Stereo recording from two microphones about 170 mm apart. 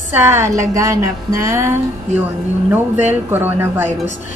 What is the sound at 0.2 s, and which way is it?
A woman's voice, 15° right (ahead or behind).